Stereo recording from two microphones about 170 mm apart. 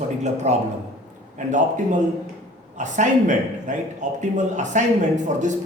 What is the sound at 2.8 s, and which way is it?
Speech, 45° right (ahead or behind).